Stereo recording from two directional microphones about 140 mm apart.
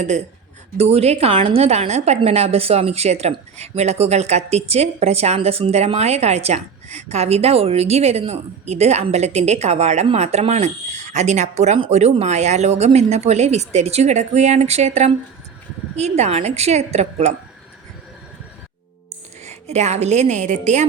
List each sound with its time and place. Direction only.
0.8 s a woman's voice: 50° right (ahead or behind)
19.5 s a woman's voice: 55° right (ahead or behind)